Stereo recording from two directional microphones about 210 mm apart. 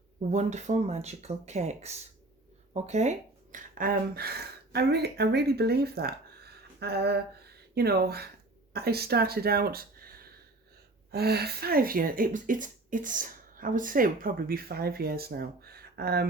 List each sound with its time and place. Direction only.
0.3 s speech: 35° right (ahead or behind); by 16.2 s 50° right (ahead or behind)